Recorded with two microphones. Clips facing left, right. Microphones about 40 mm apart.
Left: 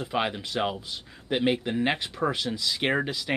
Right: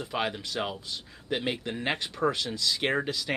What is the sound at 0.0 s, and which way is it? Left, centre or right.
Speech, centre.